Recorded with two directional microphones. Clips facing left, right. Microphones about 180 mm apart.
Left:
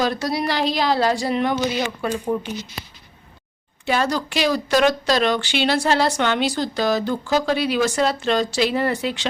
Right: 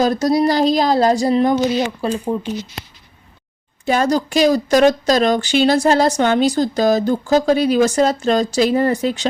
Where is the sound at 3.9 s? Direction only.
40° right (ahead or behind).